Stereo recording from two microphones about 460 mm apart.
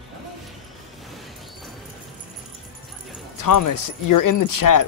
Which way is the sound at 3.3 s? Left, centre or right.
Left.